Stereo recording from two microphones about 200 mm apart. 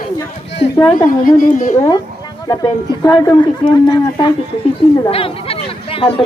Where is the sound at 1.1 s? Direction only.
45° left (ahead or behind).